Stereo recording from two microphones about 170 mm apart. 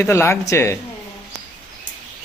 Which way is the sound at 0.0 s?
15° left (ahead or behind).